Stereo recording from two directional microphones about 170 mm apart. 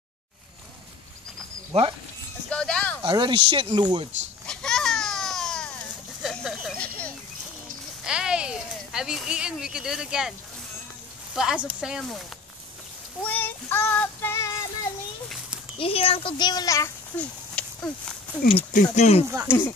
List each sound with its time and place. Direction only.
1.7 s speech: 35° right (ahead or behind)
2.5 s speech: 5° left (ahead or behind)
3.0 s speech: 25° right (ahead or behind)
4.5 s baby cry: 5° left (ahead or behind)
6.2 s a sound: 5° right (ahead or behind)
6.8 s a sound: 10° left (ahead or behind)
8.0 s speech: 5° right (ahead or behind)
11.3 s speech: 5° right (ahead or behind)
13.2 s child singing: 10° left (ahead or behind)
15.8 s speech: 35° left (ahead or behind); by 17.3 s 10° left (ahead or behind)
17.6 s a sound: 5° left (ahead or behind)
18.7 s speech: 40° left (ahead or behind)
19.2 s speech: 15° right (ahead or behind)